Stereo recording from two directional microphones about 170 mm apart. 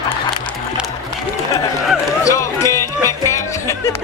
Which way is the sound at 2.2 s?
20° left (ahead or behind).